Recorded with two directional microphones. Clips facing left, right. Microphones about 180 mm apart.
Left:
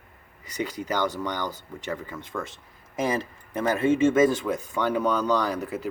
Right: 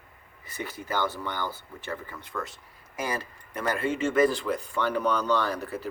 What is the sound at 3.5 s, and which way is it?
Speech, 25° left (ahead or behind).